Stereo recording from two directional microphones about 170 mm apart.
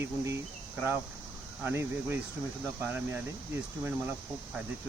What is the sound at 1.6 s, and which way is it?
Speech, 15° right (ahead or behind).